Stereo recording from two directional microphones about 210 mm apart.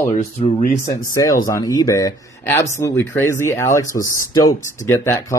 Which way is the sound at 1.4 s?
15° left (ahead or behind).